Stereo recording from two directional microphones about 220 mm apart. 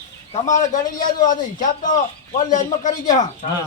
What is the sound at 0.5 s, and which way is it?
A man's voice, 35° left (ahead or behind).